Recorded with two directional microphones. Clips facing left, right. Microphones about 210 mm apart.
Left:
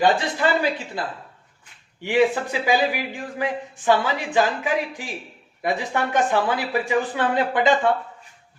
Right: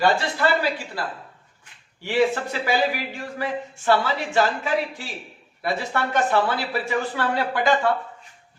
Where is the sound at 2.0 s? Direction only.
15° left (ahead or behind).